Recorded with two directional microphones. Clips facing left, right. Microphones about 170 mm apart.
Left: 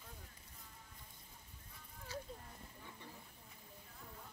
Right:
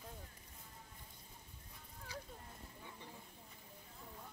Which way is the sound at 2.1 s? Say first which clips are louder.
Left 3 dB; 15° right (ahead or behind).